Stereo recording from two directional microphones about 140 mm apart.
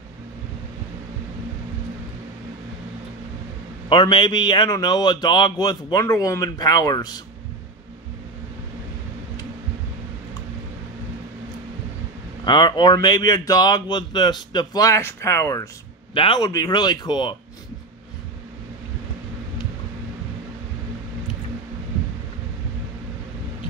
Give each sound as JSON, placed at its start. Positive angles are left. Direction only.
{"t": 3.9, "sound": "speech", "side_deg": 35}
{"t": 12.4, "sound": "speech", "side_deg": 35}
{"t": 16.2, "sound": "speech", "side_deg": 40}
{"t": 16.4, "sound": "speech", "side_deg": 30}